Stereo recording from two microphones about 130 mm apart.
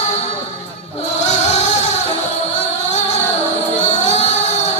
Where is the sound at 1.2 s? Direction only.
60° left (ahead or behind).